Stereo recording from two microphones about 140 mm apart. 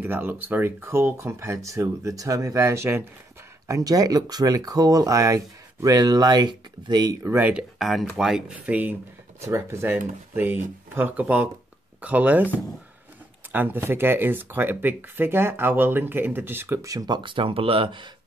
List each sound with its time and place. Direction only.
0.0 s speech: 15° right (ahead or behind); by 7.2 s 30° right (ahead or behind)
7.2 s speech: 15° right (ahead or behind)
7.8 s speech: centre (ahead or behind); by 18.0 s 40° right (ahead or behind)